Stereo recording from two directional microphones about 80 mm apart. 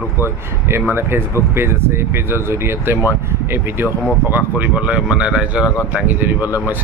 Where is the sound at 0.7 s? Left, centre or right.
Right; by 5.7 s centre.